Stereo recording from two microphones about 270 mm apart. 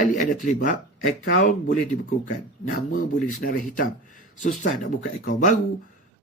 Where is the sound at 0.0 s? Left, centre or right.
Left.